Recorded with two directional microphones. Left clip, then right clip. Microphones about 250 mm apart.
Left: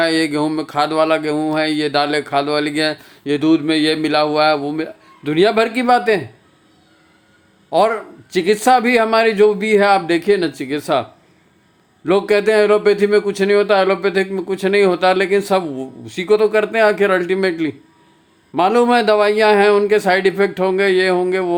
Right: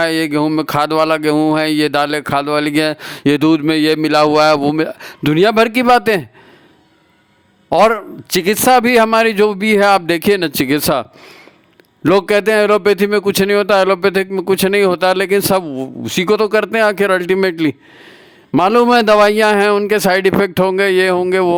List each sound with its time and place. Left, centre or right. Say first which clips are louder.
0.0 s speech: right 1 dB; right
7.7 s speech: right 4 dB; right
12.0 s speech: right 2 dB; right